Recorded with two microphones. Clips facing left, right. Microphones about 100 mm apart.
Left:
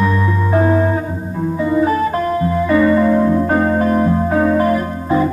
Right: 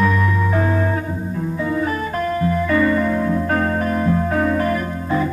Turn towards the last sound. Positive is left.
turn(degrees=20)  # may be behind; listen again after turning